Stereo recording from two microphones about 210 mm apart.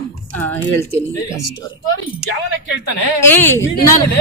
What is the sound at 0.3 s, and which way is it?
Speech, 10° left (ahead or behind).